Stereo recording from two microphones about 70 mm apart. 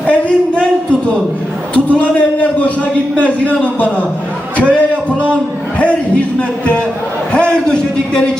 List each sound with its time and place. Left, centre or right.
0.0 s a sound: centre
1.7 s a man's voice: centre
7.3 s a man's voice: centre